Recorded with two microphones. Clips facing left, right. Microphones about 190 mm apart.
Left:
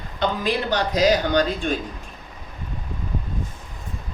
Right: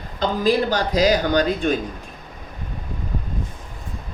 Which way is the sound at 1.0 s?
40° right (ahead or behind).